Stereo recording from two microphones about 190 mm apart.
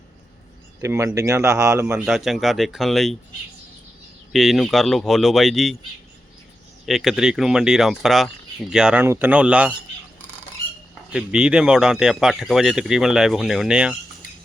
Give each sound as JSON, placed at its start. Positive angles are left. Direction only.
{"t": 0.8, "sound": "speech", "side_deg": -15}
{"t": 2.0, "sound": "speech", "side_deg": 0}
{"t": 4.3, "sound": "speech", "side_deg": 0}
{"t": 6.8, "sound": "speech", "side_deg": 0}
{"t": 11.1, "sound": "speech", "side_deg": -5}